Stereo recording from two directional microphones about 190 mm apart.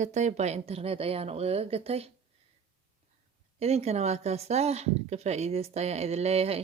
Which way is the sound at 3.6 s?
35° right (ahead or behind).